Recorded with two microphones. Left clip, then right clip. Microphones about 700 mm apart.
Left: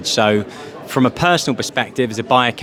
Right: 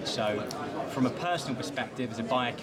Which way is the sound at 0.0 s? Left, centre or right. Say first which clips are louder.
Left 14 dB; left.